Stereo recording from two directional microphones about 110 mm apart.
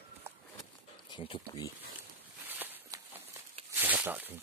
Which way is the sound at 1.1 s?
50° left (ahead or behind).